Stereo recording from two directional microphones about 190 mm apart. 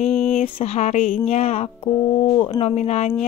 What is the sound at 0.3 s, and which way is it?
A woman's voice, 35° left (ahead or behind).